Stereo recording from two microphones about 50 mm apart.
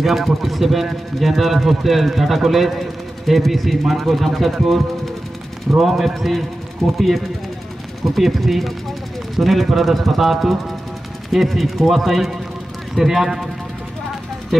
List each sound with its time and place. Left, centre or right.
0.0 s a man's voice: centre
5.8 s a man's voice: centre
6.8 s speech: centre
8.0 s a man's voice: centre
14.5 s speech: centre